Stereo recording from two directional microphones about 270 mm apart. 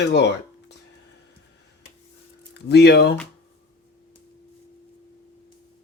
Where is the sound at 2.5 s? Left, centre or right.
Left.